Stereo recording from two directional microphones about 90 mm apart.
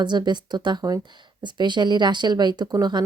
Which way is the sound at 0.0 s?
55° right (ahead or behind).